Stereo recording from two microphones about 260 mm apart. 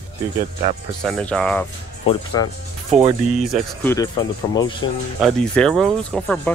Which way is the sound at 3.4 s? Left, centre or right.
Centre.